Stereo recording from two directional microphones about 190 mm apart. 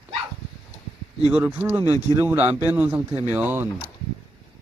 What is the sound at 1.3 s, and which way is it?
Speech, 10° right (ahead or behind).